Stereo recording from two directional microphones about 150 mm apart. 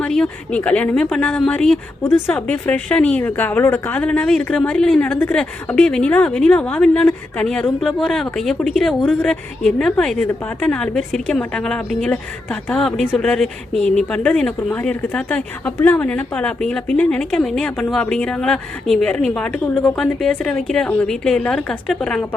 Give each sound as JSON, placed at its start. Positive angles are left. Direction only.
{"t": 0.0, "sound": "speech", "side_deg": 5}
{"t": 2.0, "sound": "a woman's voice", "side_deg": 15}